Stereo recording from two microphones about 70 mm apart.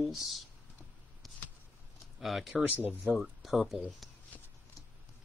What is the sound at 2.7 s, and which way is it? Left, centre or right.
Speech, right.